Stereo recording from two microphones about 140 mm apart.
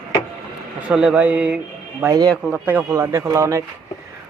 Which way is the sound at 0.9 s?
5° right (ahead or behind).